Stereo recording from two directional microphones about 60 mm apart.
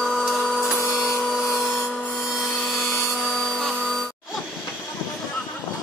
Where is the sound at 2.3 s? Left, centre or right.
Centre.